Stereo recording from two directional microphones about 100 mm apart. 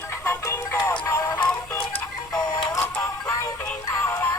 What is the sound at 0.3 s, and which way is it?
Music, 25° left (ahead or behind).